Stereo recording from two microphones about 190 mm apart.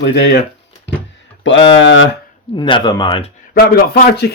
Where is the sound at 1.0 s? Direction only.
70° left (ahead or behind).